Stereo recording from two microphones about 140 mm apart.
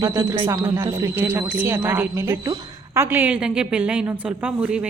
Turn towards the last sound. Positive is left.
turn(degrees=-10)  # may be behind; listen again after turning